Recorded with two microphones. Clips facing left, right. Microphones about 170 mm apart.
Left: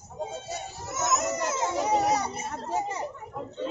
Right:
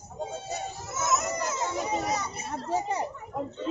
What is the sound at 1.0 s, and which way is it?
Children playing, 75° left (ahead or behind).